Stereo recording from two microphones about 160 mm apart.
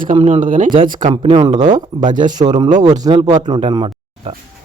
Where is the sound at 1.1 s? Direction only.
35° right (ahead or behind).